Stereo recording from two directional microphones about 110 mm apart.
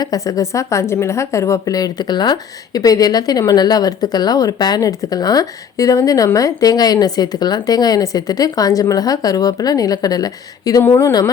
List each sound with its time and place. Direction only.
0.0 s a woman's voice: 35° left (ahead or behind)
10.8 s speech: 25° left (ahead or behind)